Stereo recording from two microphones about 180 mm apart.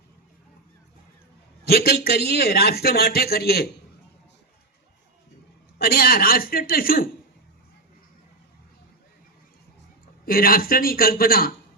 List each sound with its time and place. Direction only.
1.6 s a man's voice: 60° left (ahead or behind)
5.8 s a man's voice: 55° left (ahead or behind)
10.2 s a man's voice: 55° left (ahead or behind)